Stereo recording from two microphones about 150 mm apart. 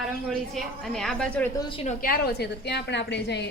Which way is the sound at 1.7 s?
45° left (ahead or behind).